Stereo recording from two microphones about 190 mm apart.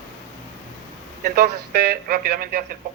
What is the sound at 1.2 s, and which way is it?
Speech, 50° right (ahead or behind).